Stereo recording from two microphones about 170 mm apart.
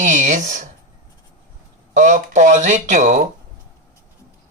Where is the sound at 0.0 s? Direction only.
45° right (ahead or behind).